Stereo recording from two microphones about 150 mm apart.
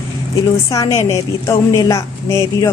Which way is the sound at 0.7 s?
20° left (ahead or behind).